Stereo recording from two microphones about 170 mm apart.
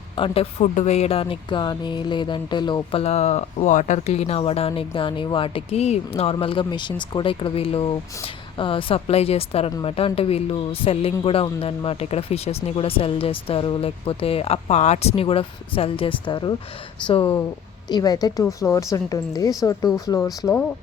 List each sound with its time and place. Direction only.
0.2 s a woman's voice: 40° left (ahead or behind); by 20.2 s 20° left (ahead or behind)